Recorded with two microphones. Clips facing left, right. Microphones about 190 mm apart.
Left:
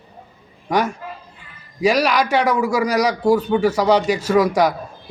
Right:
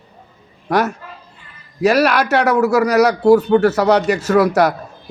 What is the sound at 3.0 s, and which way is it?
Speech, 10° right (ahead or behind).